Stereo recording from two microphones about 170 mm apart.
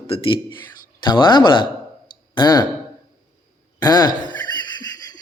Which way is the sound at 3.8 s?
25° left (ahead or behind).